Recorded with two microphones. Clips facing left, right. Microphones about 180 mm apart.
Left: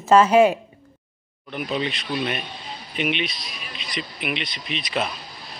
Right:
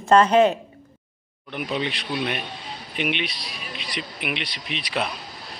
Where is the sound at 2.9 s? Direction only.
60° right (ahead or behind).